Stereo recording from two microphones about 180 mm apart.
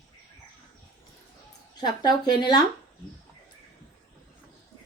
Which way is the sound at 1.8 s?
25° left (ahead or behind).